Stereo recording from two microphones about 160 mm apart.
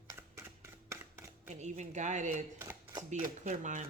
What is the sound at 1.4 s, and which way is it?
Speech, 45° right (ahead or behind).